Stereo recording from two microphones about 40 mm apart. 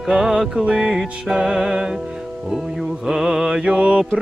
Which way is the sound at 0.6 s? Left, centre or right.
Right.